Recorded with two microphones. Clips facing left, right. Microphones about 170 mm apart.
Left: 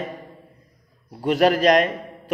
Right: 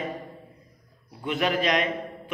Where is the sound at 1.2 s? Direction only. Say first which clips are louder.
Left 8 dB; 40° left (ahead or behind).